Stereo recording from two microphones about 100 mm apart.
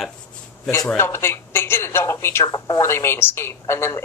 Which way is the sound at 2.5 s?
40° left (ahead or behind).